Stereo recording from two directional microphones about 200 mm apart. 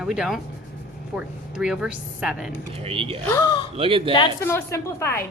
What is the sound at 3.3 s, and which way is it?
Speech, 20° left (ahead or behind).